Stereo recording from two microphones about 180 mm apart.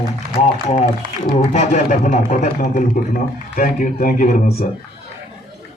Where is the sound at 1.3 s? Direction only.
40° left (ahead or behind).